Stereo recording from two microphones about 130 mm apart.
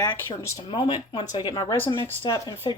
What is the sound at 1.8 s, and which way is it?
Speech, 40° left (ahead or behind).